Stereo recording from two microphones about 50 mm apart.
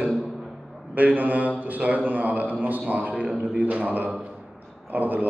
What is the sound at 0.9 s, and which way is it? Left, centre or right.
A man's voice, right.